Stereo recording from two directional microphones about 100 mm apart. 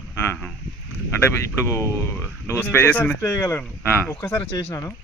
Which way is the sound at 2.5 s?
20° left (ahead or behind).